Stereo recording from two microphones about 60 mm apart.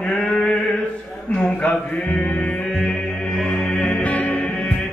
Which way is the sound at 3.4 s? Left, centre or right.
Centre.